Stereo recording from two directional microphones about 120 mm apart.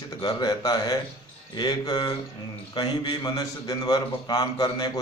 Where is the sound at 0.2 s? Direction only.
35° left (ahead or behind).